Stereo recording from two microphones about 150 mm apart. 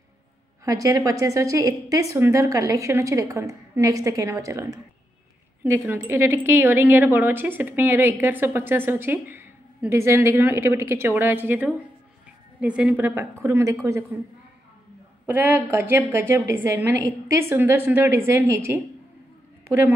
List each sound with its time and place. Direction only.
0.7 s a woman's voice: 25° right (ahead or behind)
15.2 s a woman's voice: 15° right (ahead or behind)